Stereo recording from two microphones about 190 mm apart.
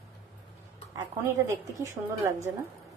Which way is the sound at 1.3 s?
15° right (ahead or behind).